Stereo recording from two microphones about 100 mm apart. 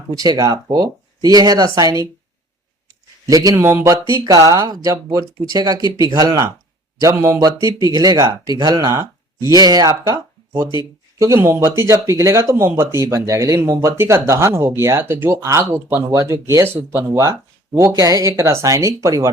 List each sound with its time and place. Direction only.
0.1 s speech: 40° right (ahead or behind)
3.2 s speech: 35° right (ahead or behind)
4.1 s speech: 35° right (ahead or behind)